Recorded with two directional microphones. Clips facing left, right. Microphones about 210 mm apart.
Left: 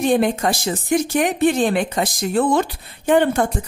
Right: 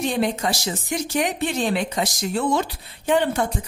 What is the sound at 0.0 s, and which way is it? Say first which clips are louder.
Speech: left 5 dB; 50° left (ahead or behind).